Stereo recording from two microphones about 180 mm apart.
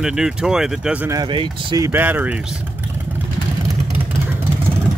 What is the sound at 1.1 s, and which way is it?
Speech, 25° right (ahead or behind).